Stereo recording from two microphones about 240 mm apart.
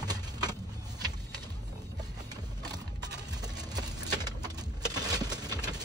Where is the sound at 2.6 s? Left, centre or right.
Centre.